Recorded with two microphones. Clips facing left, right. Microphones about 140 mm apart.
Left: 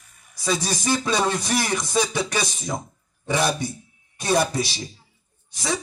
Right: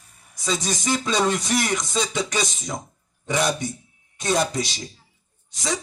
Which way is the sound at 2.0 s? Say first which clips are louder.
Left 3 dB; 20° right (ahead or behind).